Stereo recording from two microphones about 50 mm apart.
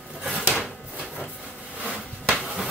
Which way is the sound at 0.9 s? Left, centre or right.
Right.